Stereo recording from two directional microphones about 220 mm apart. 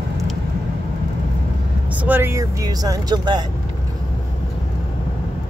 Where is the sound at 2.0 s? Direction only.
10° right (ahead or behind).